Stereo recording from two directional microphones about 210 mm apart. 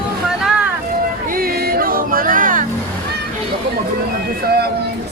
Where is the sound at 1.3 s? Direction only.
45° right (ahead or behind).